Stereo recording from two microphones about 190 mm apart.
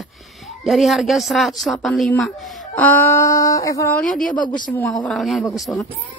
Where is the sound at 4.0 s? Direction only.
Centre (ahead or behind).